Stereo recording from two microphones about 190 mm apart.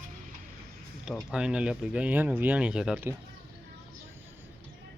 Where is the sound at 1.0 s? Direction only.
5° right (ahead or behind).